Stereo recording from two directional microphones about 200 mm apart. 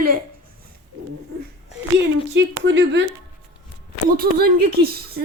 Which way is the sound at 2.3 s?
65° right (ahead or behind).